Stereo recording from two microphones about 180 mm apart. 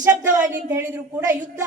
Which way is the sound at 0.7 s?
15° right (ahead or behind).